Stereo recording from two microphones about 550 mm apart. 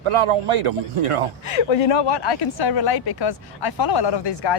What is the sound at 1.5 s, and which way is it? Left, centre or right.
Speech, left.